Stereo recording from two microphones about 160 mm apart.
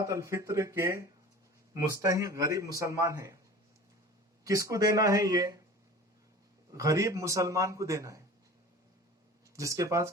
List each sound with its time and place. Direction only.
0.0 s a man's voice: 20° right (ahead or behind)
4.4 s a man's voice: 20° right (ahead or behind)
6.7 s a man's voice: 20° right (ahead or behind)
9.6 s a man's voice: 20° right (ahead or behind)